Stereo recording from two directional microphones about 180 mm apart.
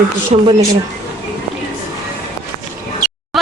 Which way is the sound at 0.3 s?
35° right (ahead or behind).